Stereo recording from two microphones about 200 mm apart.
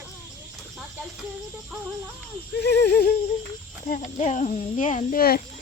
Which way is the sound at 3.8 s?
40° left (ahead or behind).